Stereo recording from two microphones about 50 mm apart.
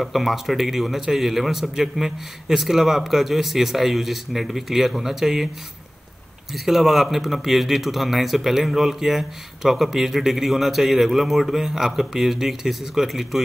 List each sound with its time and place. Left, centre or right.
0.0 s speech: centre
6.5 s speech: centre